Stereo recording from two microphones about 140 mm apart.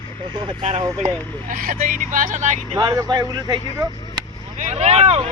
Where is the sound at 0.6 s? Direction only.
55° right (ahead or behind).